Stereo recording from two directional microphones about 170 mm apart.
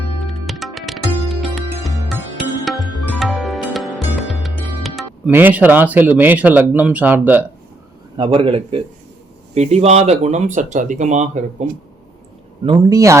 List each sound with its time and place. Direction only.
0.3 s music: centre (ahead or behind)
5.3 s speech: 10° right (ahead or behind)
8.1 s a man's voice: 30° right (ahead or behind)
12.6 s speech: 25° right (ahead or behind)